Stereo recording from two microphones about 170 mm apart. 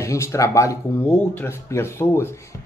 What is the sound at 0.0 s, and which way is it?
Speech, 15° left (ahead or behind).